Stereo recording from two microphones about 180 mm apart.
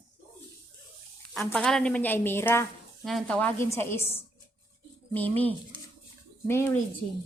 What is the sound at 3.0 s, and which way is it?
A woman's voice, centre (ahead or behind).